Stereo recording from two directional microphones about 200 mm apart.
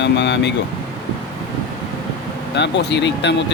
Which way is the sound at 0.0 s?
60° left (ahead or behind).